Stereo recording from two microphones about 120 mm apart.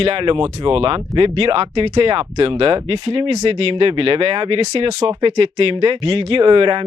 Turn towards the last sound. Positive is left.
turn(degrees=-45)  # may be behind; listen again after turning